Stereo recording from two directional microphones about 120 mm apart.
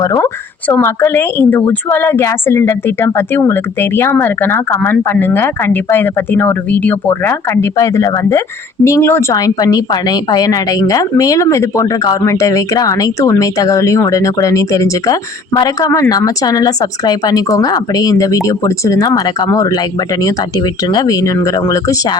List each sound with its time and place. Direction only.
0.0 s speech: 30° left (ahead or behind)
9.3 s a woman's voice: 30° left (ahead or behind)